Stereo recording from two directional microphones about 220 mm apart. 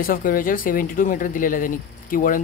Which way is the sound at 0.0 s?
40° left (ahead or behind).